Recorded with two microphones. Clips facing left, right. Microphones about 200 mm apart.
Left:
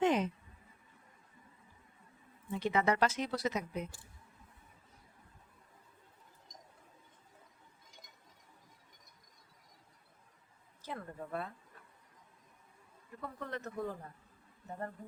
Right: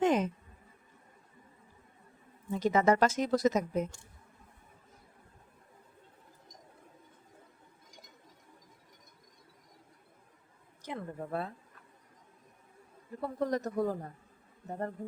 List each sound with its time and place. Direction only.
0.0 s a sound: 45° right (ahead or behind)
2.5 s speech: 40° right (ahead or behind)
11.2 s a man's voice: 35° right (ahead or behind)
13.2 s a man's voice: 40° right (ahead or behind)